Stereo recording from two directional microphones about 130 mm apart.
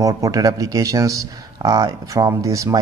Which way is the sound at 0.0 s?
25° right (ahead or behind).